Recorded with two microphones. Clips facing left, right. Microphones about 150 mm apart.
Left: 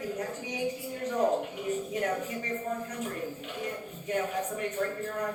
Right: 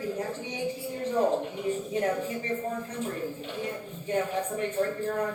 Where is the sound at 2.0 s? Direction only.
30° right (ahead or behind).